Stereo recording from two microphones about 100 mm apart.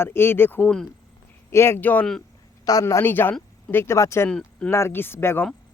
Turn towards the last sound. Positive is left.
turn(degrees=25)  # may be behind; listen again after turning